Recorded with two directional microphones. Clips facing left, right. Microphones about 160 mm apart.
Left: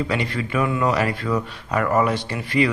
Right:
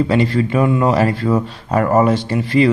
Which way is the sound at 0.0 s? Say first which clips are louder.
Right 9 dB; 30° right (ahead or behind).